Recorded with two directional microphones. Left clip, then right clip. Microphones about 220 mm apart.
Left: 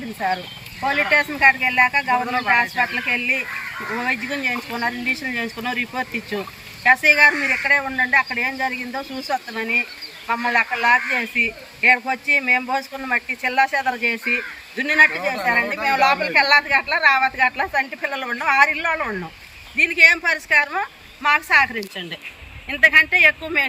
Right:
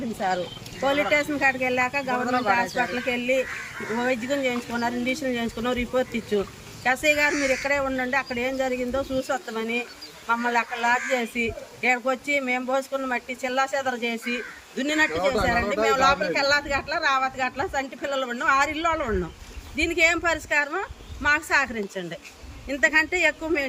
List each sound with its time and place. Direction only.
0.9 s speech: 10° right (ahead or behind)
15.2 s speech: 50° right (ahead or behind)
15.9 s speech: 10° right (ahead or behind)